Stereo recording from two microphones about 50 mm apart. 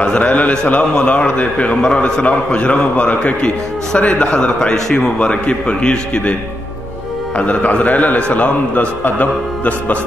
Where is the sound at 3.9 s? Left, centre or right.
Left.